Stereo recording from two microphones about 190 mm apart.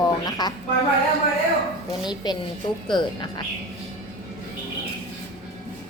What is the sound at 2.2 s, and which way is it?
A woman's voice, 20° left (ahead or behind).